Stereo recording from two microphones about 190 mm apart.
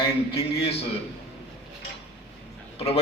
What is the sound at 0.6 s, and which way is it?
Speech, 30° left (ahead or behind).